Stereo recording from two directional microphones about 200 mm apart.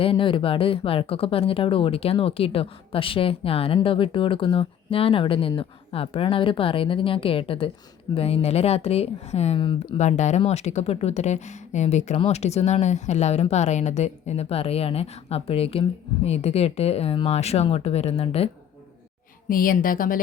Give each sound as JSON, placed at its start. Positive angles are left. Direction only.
{"t": 0.0, "sound": "a woman's voice", "side_deg": 25}
{"t": 10.0, "sound": "a woman's voice", "side_deg": 35}
{"t": 19.5, "sound": "speech", "side_deg": 45}